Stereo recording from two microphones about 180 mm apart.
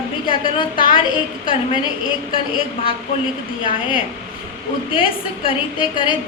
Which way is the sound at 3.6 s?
30° left (ahead or behind).